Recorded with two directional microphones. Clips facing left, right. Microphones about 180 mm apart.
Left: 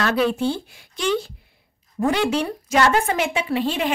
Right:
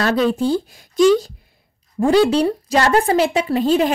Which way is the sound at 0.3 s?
40° right (ahead or behind).